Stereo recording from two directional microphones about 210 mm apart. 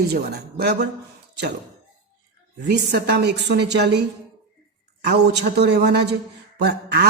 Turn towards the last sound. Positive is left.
turn(degrees=-50)  # may be behind; listen again after turning